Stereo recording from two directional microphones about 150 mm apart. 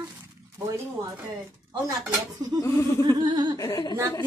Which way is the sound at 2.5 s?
20° left (ahead or behind).